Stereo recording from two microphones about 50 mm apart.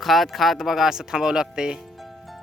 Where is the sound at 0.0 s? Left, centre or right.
Centre.